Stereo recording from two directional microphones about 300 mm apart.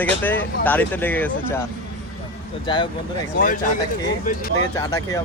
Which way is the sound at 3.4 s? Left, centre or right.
Left.